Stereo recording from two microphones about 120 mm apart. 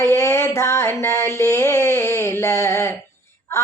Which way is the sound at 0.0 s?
25° left (ahead or behind).